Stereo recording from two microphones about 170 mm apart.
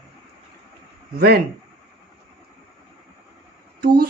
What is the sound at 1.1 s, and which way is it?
Speech, 65° right (ahead or behind).